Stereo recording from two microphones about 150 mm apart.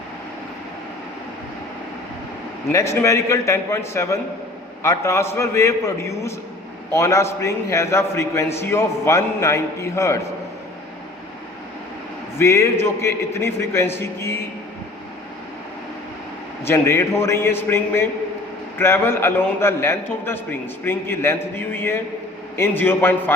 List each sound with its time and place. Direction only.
2.7 s a man's voice: 20° left (ahead or behind)
12.4 s a man's voice: 20° left (ahead or behind)
16.6 s a man's voice: 15° left (ahead or behind)